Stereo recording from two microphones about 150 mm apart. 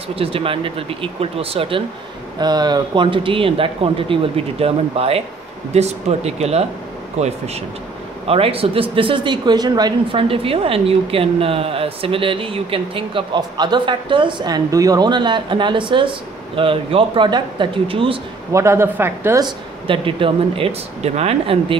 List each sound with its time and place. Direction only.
0.1 s speech: 40° right (ahead or behind)
2.4 s speech: 30° right (ahead or behind)
18.5 s a woman's voice: 20° right (ahead or behind)
19.4 s speech: 35° right (ahead or behind)